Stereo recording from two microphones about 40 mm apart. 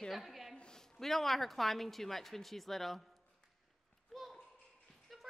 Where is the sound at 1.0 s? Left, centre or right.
Centre.